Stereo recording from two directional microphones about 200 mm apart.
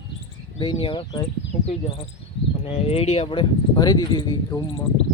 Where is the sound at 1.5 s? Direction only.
40° left (ahead or behind).